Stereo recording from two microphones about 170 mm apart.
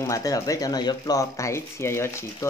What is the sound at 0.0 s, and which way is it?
Speech, 20° left (ahead or behind).